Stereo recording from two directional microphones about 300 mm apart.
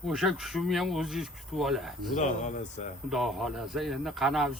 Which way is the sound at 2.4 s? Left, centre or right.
Left.